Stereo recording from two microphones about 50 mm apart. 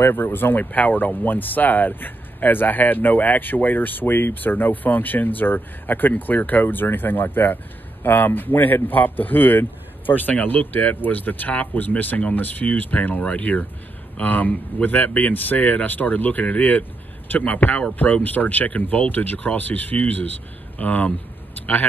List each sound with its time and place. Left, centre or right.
0.0 s speech: left
13.2 s speech: left
14.1 s speech: left